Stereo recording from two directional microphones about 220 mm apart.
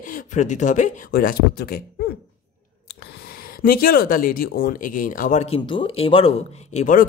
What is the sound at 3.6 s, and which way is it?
Speech, 40° left (ahead or behind).